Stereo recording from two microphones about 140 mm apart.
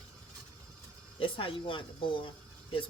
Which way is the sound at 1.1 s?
40° left (ahead or behind).